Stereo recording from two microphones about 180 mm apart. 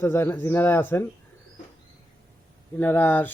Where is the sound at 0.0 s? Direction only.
10° left (ahead or behind).